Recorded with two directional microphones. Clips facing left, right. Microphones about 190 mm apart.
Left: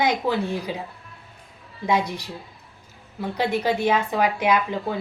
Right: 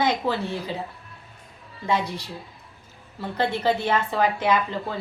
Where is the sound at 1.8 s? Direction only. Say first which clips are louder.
Left 2 dB; 15° left (ahead or behind).